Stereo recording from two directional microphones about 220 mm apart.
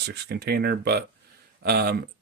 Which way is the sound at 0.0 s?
50° right (ahead or behind).